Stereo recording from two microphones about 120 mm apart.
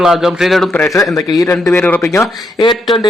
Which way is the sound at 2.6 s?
40° left (ahead or behind).